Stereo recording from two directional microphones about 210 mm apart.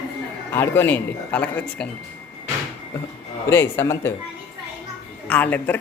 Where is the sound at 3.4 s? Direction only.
10° left (ahead or behind).